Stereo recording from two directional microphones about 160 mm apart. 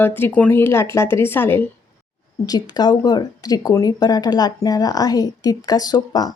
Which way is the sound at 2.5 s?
25° left (ahead or behind).